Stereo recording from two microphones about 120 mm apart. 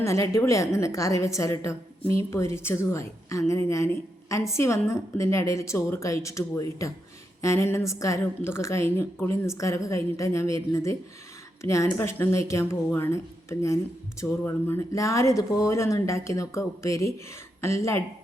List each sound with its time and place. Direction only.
0.0 s a woman's voice: 25° left (ahead or behind)